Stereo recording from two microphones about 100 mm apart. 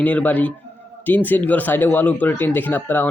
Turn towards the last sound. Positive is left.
turn(degrees=20)  # may be behind; listen again after turning